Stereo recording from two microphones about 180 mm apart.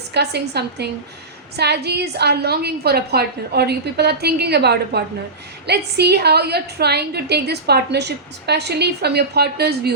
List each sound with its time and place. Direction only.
0.1 s a woman's voice: 65° right (ahead or behind)